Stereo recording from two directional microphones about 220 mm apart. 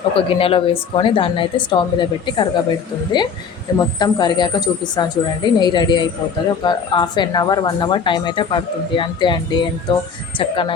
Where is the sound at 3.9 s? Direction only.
20° left (ahead or behind).